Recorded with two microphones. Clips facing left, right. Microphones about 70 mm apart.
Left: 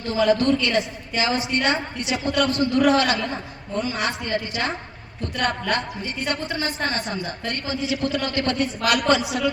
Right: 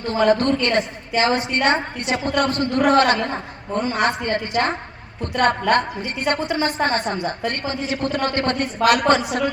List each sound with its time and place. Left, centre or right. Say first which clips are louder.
0.1 s a woman's voice: right 1 dB; right